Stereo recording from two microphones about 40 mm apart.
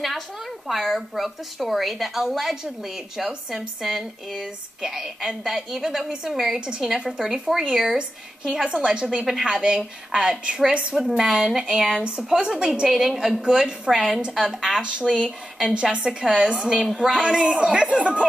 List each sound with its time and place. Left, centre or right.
0.7 s a woman's voice: centre; by 9.2 s right
9.2 s a woman's voice: centre
9.5 s a woman's voice: centre
10.7 s a woman's voice: right
11.0 s a woman's voice: centre
12.4 s a woman's voice: right
12.8 s a woman's voice: centre
16.8 s a woman's voice: centre
17.1 s a woman's voice: right